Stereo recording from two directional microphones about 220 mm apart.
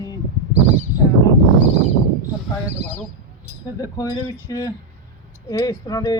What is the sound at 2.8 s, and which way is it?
Speech, 10° left (ahead or behind).